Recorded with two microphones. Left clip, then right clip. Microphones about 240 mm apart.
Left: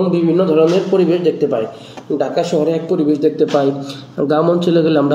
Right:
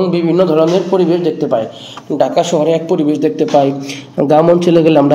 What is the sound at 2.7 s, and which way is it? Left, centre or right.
Speech, right.